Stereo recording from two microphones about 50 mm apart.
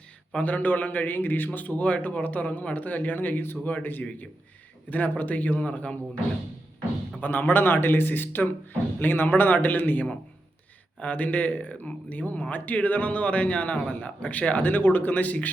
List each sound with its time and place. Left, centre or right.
0.3 s a man's voice: left
4.9 s a man's voice: left
7.2 s a man's voice: left